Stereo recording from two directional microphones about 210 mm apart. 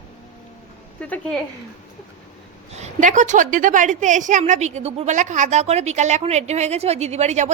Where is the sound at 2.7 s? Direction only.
35° right (ahead or behind).